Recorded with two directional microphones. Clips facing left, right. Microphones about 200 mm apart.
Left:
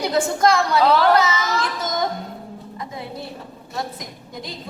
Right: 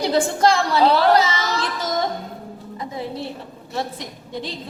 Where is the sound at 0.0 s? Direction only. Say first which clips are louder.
Right 1 dB; 30° right (ahead or behind).